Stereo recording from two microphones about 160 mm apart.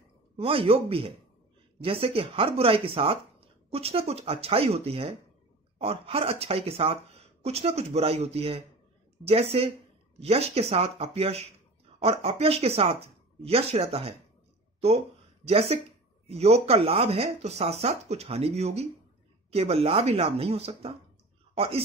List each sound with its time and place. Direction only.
0.4 s speech: 35° right (ahead or behind)
15.4 s speech: 40° right (ahead or behind)